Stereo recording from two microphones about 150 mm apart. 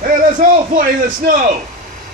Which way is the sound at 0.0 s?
65° right (ahead or behind).